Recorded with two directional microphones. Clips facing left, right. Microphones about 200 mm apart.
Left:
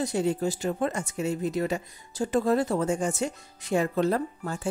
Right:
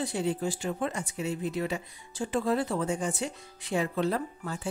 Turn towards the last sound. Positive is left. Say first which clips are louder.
# left 4 dB
turn(degrees=45)  # may be behind; listen again after turning